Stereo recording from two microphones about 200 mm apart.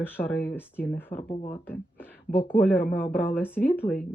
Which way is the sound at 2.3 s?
45° left (ahead or behind).